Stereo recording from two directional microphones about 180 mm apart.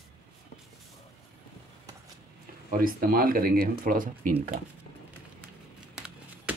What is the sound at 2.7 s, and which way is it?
Speech, 50° right (ahead or behind).